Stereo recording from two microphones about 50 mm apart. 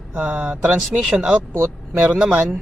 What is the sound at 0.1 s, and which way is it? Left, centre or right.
Speech, right.